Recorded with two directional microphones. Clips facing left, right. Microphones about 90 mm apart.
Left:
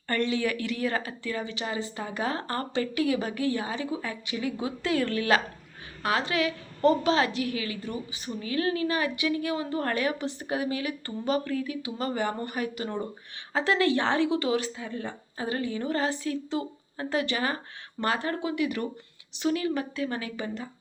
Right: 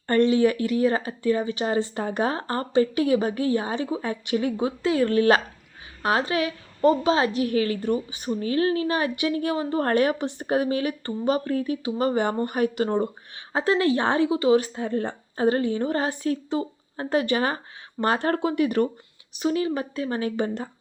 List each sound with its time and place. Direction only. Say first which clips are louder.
0.1 s speech: right 8 dB; 30° right (ahead or behind)
2.3 s speech: right 7 dB; 30° right (ahead or behind)
4.8 s speech: right 7 dB; 20° right (ahead or behind); by 8.3 s 45° right (ahead or behind)
8.3 s speech: right 6 dB; 35° right (ahead or behind)
13.5 s speech: right 3 dB; 30° right (ahead or behind)
14.7 s speech: right 8 dB; 45° right (ahead or behind)
16.1 s speech: right 4 dB; 45° right (ahead or behind)
18.2 s speech: right 6 dB; 45° right (ahead or behind)
19.4 s speech: right 3 dB; 25° right (ahead or behind)
20.3 s speech: right 7 dB; 50° right (ahead or behind)